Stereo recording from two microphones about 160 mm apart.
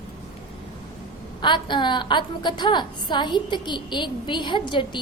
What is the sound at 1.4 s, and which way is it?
A woman's voice, 30° left (ahead or behind).